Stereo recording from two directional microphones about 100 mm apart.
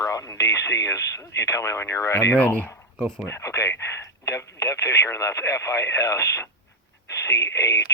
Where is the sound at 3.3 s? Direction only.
25° left (ahead or behind).